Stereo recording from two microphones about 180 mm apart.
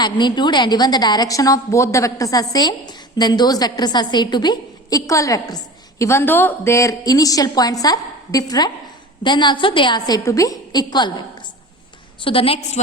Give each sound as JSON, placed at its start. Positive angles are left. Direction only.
{"t": 0.0, "sound": "a woman's voice", "side_deg": 25}
{"t": 12.2, "sound": "a woman's voice", "side_deg": 30}